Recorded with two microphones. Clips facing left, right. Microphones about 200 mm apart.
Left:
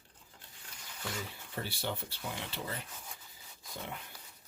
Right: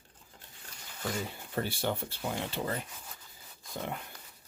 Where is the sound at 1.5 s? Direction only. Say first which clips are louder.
Right 6 dB; 50° right (ahead or behind).